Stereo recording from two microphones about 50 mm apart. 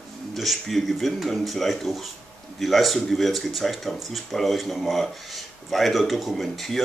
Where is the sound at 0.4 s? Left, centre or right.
Centre.